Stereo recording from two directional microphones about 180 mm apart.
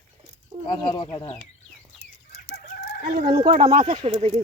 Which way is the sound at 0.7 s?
25° left (ahead or behind).